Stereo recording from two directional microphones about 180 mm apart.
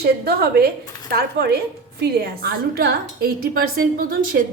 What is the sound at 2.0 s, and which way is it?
A woman's voice, 65° right (ahead or behind).